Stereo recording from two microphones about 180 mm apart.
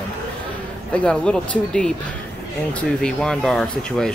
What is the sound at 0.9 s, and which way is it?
Speech, 5° left (ahead or behind).